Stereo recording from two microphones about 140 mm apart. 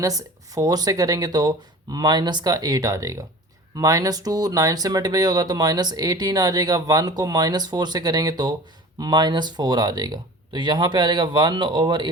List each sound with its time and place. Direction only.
0.0 s speech: 25° right (ahead or behind)